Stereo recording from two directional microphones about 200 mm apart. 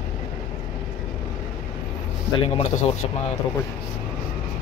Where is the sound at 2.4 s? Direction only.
35° left (ahead or behind).